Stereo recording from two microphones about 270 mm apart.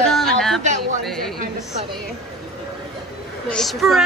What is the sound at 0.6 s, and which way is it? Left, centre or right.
Speech, right.